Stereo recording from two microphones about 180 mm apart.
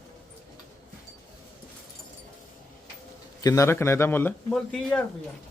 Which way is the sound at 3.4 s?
20° left (ahead or behind).